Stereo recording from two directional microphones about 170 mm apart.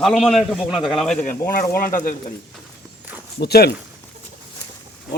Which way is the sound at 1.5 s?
55° left (ahead or behind).